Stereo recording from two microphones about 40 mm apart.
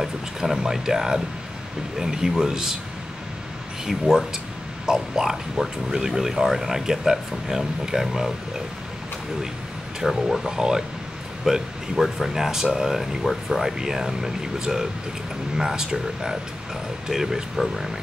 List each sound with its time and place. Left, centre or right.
0.0 s speech: centre
3.8 s speech: centre
10.0 s speech: centre